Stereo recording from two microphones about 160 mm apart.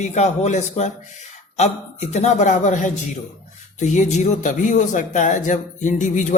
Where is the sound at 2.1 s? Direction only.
45° left (ahead or behind).